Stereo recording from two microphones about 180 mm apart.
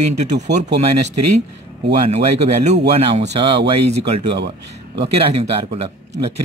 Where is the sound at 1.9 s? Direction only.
35° right (ahead or behind).